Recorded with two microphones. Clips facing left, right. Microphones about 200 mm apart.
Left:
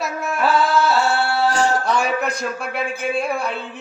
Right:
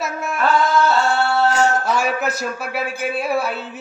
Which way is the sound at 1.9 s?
Centre (ahead or behind).